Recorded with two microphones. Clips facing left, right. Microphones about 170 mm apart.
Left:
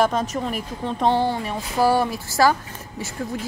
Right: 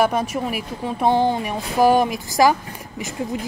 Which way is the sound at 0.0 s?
10° right (ahead or behind).